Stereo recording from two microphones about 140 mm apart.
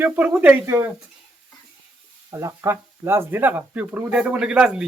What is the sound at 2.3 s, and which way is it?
Speech, 20° right (ahead or behind).